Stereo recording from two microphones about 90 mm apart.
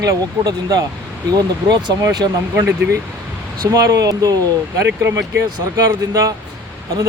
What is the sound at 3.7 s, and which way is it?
Speech, 40° right (ahead or behind).